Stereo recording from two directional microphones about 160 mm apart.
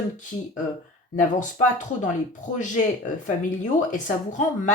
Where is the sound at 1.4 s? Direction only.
50° left (ahead or behind).